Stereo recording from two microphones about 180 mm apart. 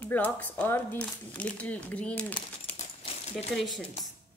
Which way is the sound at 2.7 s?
35° left (ahead or behind).